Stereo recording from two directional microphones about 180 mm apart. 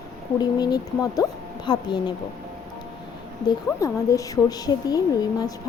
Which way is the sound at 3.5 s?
20° left (ahead or behind).